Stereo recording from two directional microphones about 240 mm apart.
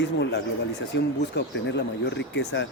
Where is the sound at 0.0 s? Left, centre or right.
Left.